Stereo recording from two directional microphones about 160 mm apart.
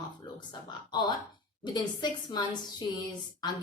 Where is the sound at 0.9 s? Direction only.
25° left (ahead or behind).